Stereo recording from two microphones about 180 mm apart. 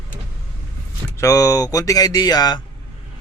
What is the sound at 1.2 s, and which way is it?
Speech, 20° left (ahead or behind).